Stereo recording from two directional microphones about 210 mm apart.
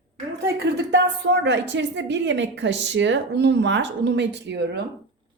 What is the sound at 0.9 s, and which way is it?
A woman's voice, 55° right (ahead or behind).